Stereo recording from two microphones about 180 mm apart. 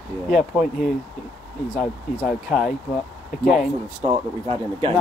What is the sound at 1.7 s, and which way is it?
Speech, centre (ahead or behind).